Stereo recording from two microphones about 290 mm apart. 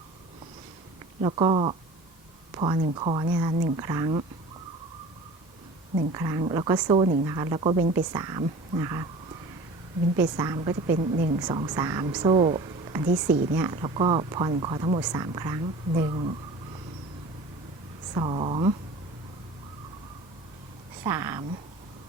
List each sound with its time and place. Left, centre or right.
1.2 s a woman's voice: centre
6.0 s a woman's voice: centre
10.3 s a woman's voice: centre
18.1 s a woman's voice: centre
21.0 s a woman's voice: centre